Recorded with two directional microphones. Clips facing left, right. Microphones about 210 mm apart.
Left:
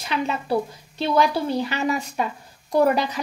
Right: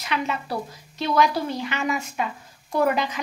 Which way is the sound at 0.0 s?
30° left (ahead or behind).